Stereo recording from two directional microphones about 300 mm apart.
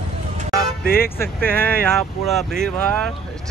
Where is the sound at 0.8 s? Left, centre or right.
Left.